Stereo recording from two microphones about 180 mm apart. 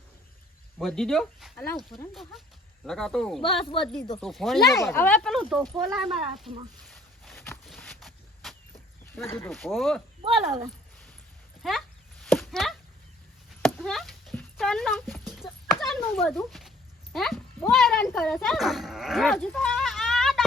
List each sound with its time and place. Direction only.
0.8 s speech: centre (ahead or behind)
2.8 s speech: 5° left (ahead or behind)
4.7 s speech: 15° left (ahead or behind)
7.9 s a sound: centre (ahead or behind)
9.2 s speech: 15° left (ahead or behind)
9.5 s speech: centre (ahead or behind)
11.6 s speech: centre (ahead or behind)
12.2 s chop: centre (ahead or behind)
13.6 s a sound: centre (ahead or behind)